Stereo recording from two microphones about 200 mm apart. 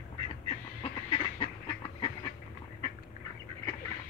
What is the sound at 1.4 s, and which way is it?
Duck, 25° left (ahead or behind).